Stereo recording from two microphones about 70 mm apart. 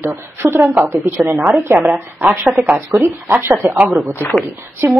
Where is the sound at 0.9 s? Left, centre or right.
Right.